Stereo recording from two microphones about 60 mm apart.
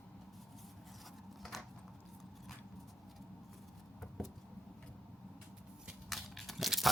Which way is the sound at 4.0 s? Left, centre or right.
Centre.